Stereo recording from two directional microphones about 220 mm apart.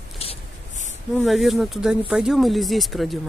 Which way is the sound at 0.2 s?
25° left (ahead or behind).